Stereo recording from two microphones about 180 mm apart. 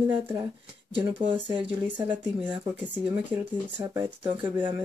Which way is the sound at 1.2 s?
25° right (ahead or behind).